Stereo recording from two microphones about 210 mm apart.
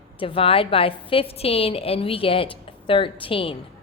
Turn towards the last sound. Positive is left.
turn(degrees=25)  # may be behind; listen again after turning